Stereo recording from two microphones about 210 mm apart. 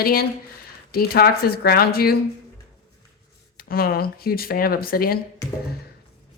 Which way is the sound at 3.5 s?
45° left (ahead or behind).